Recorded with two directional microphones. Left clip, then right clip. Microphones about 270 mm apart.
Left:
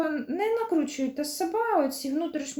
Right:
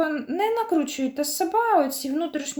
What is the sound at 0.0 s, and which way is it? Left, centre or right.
Speech, centre.